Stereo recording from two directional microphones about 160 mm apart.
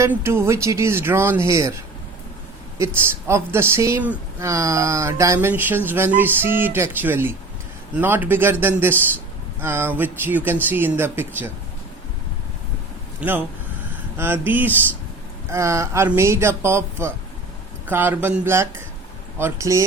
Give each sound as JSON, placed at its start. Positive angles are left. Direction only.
{"t": 0.0, "sound": "speech", "side_deg": -15}
{"t": 2.7, "sound": "speech", "side_deg": -15}
{"t": 13.1, "sound": "speech", "side_deg": -10}